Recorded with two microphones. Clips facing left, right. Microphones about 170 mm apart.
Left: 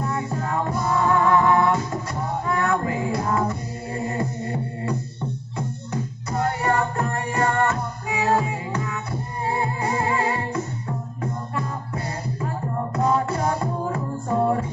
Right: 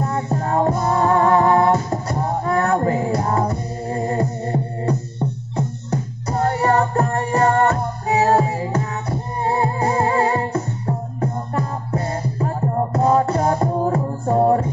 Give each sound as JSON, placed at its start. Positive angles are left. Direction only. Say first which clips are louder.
{"t": 0.0, "sound": "music", "louder": "right 4 dB", "side_deg": -40}